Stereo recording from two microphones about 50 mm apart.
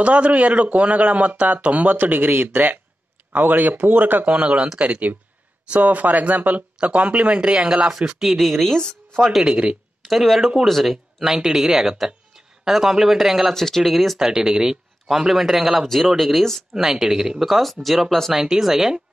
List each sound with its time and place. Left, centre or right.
0.0 s a man's voice: right
4.3 s a man's voice: right
8.2 s speech: centre
9.4 s speech: centre
10.0 s speech: centre
13.6 s speech: centre
16.7 s speech: centre